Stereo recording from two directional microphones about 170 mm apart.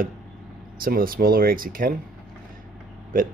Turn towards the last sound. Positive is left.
turn(degrees=-55)  # may be behind; listen again after turning